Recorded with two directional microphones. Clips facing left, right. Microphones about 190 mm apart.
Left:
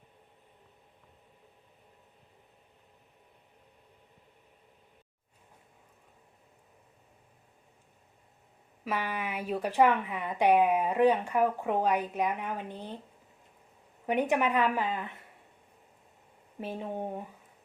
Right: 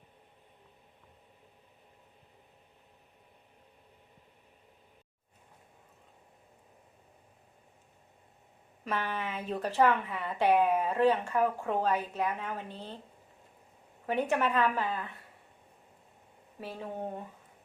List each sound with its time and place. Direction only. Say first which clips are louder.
8.8 s a woman's voice: left 1 dB; 10° left (ahead or behind)
14.1 s a woman's voice: left 2 dB; 15° left (ahead or behind)
16.6 s speech: left 3 dB; 20° left (ahead or behind)